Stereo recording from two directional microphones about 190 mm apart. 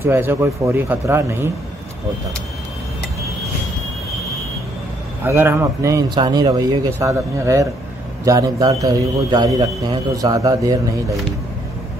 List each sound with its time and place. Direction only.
0.0 s speech: 10° right (ahead or behind)
5.2 s a man's voice: 10° right (ahead or behind)